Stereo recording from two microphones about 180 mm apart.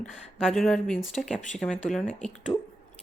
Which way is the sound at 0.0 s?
5° left (ahead or behind).